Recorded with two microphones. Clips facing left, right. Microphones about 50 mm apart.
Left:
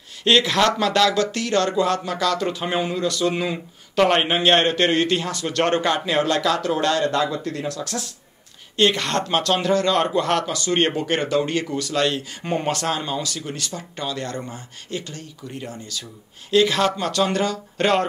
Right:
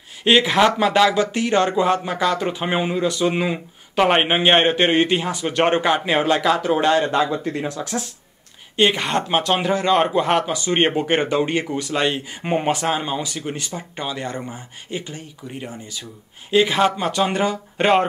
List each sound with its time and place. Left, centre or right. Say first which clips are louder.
0.2 s speech: right 2 dB; centre